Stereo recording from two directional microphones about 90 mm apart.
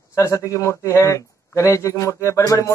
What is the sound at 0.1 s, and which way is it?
A man's voice, 35° left (ahead or behind).